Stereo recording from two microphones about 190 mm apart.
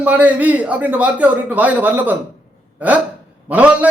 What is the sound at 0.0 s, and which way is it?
A man's voice, 10° right (ahead or behind).